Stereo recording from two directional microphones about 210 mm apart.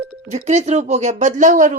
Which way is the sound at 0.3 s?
30° right (ahead or behind).